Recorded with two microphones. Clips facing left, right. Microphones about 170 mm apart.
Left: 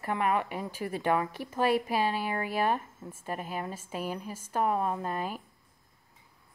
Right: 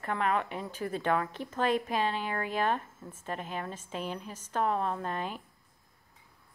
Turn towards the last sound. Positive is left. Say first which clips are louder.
# left 1 dB
turn(degrees=5)  # may be behind; listen again after turning